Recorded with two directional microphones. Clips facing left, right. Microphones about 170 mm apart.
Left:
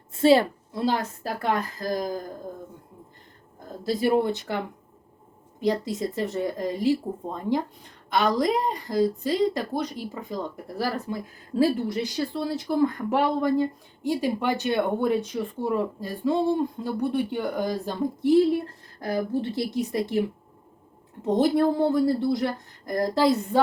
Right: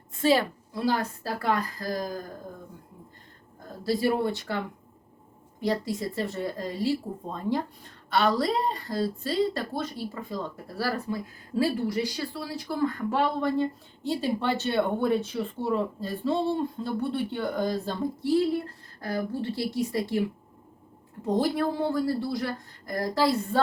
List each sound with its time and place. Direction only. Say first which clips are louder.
0.2 s a woman's voice: left 5 dB; 30° left (ahead or behind)
3.7 s a woman's voice: left 2 dB; 20° left (ahead or behind)